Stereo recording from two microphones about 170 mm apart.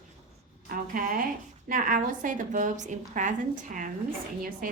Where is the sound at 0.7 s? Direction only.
55° right (ahead or behind).